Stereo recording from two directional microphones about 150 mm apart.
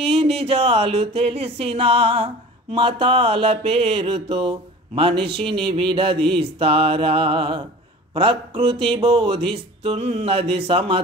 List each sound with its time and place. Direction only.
0.0 s mantra: 40° right (ahead or behind)